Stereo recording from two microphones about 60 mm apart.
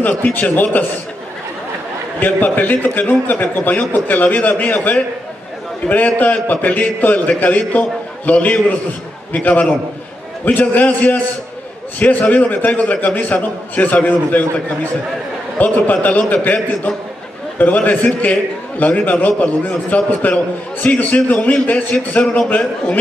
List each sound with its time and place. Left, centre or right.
0.0 s a man's voice: left
2.1 s a man's voice: left
17.6 s a man's voice: left